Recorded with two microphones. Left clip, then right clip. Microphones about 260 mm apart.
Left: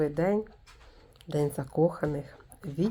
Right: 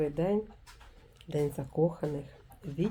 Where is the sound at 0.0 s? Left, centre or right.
Left.